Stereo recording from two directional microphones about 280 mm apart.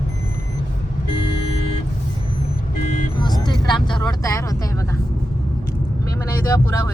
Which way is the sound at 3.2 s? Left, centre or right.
Centre.